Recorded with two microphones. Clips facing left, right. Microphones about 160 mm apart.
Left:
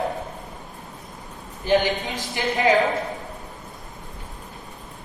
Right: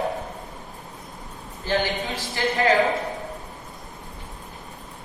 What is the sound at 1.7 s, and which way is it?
Speech, 15° left (ahead or behind).